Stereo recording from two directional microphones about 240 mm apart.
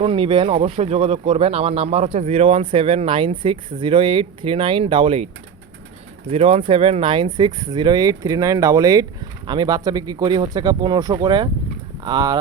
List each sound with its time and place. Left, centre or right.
0.0 s speech: right
6.3 s speech: right